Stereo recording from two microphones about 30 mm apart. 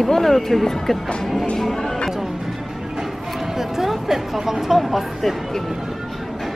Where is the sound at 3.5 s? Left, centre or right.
Centre.